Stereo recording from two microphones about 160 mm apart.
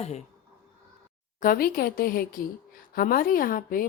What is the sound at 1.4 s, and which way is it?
A woman's voice, 65° left (ahead or behind).